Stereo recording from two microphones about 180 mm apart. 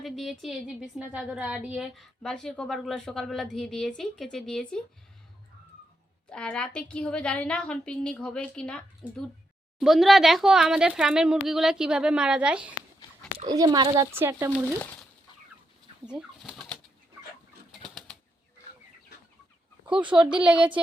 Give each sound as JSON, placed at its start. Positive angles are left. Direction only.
{"t": 0.0, "sound": "a woman's voice", "side_deg": 0}
{"t": 6.3, "sound": "a woman's voice", "side_deg": 5}
{"t": 13.5, "sound": "speech", "side_deg": -25}
{"t": 14.1, "sound": "speech", "side_deg": -15}
{"t": 16.0, "sound": "bird", "side_deg": -5}
{"t": 17.7, "sound": "bird flight", "side_deg": 0}
{"t": 20.1, "sound": "a woman's voice", "side_deg": -5}